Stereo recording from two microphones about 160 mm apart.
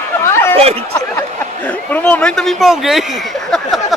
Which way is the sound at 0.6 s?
40° right (ahead or behind).